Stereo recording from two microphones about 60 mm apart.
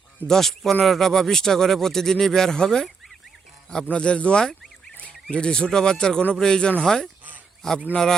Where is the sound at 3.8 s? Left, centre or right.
Centre.